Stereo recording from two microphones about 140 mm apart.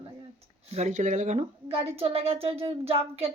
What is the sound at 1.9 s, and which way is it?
Speech, 45° right (ahead or behind).